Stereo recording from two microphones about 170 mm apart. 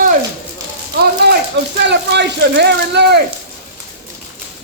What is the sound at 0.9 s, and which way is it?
Speech, 65° right (ahead or behind).